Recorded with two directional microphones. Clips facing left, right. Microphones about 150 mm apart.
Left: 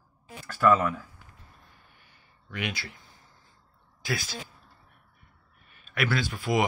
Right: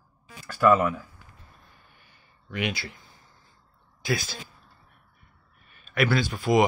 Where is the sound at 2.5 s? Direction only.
20° right (ahead or behind).